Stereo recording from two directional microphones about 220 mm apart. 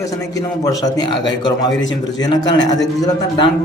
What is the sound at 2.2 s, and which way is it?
A man's voice, 20° left (ahead or behind).